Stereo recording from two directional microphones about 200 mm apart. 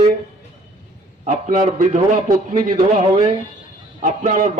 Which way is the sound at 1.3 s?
35° right (ahead or behind).